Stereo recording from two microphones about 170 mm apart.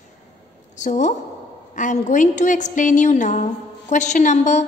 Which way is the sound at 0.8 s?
45° left (ahead or behind).